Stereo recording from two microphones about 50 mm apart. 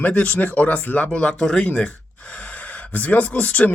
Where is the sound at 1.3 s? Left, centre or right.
Centre.